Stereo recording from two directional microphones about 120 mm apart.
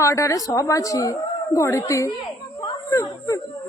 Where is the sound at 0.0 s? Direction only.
25° left (ahead or behind).